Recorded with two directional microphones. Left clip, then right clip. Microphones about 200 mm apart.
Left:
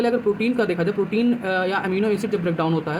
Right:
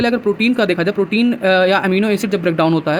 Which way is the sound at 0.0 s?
50° right (ahead or behind).